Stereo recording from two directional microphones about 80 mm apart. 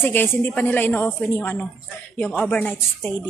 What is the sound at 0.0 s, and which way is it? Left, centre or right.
A woman's voice, left.